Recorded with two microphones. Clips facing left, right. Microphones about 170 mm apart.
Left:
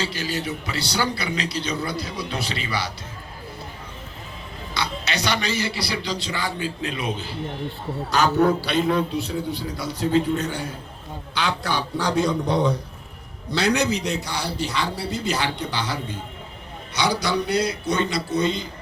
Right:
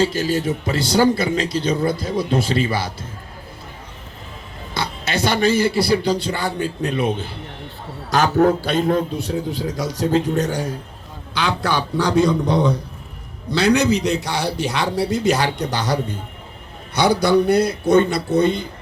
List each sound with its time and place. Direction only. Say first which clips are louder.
0.0 s speech: right 8 dB; 45° right (ahead or behind)
4.7 s speech: right 4 dB; 50° right (ahead or behind)
11.6 s a man's voice: right 5 dB; 90° right
13.6 s a man's voice: right 5 dB; 90° right; by 18.7 s 55° right (ahead or behind)